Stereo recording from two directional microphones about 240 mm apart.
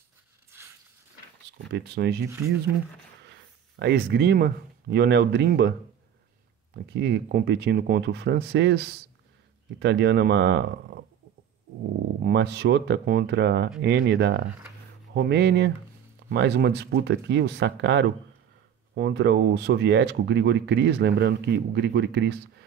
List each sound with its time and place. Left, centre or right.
1.7 s speech: right
3.8 s speech: right
6.7 s speech: right
12.2 s speech: right